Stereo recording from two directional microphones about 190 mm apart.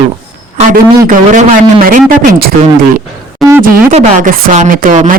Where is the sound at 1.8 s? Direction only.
45° right (ahead or behind).